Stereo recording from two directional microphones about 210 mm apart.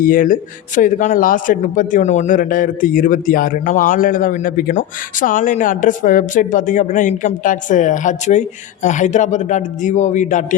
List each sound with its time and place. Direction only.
0.0 s speech: 40° left (ahead or behind)